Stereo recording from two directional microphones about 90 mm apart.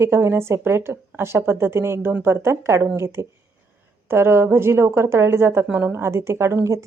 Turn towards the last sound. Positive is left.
turn(degrees=-35)  # may be behind; listen again after turning